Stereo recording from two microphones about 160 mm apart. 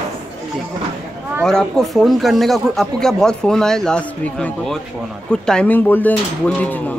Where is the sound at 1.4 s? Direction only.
5° left (ahead or behind).